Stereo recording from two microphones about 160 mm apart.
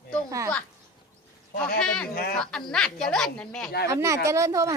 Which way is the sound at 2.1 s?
70° left (ahead or behind).